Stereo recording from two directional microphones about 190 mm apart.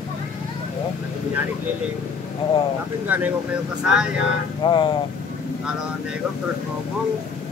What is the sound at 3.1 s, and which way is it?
Speech, 10° right (ahead or behind).